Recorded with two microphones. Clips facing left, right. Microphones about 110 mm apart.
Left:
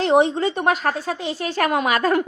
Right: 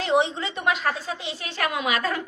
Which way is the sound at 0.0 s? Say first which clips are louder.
Left 6 dB; 45° left (ahead or behind).